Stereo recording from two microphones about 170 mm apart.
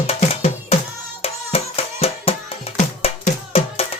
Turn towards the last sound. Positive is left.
turn(degrees=35)  # may be behind; listen again after turning